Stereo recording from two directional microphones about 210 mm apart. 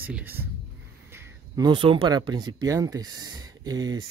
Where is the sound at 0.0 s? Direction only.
10° right (ahead or behind).